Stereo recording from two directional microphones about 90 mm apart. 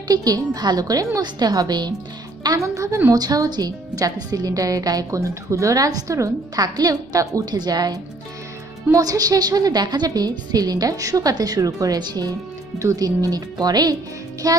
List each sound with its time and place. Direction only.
0.1 s a woman's voice: 45° right (ahead or behind)